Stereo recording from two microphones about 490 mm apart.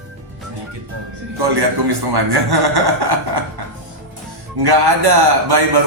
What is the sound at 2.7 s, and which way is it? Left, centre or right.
Speech, right.